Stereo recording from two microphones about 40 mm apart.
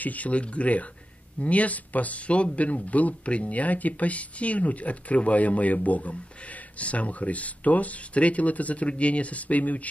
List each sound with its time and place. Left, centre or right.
0.0 s speech: left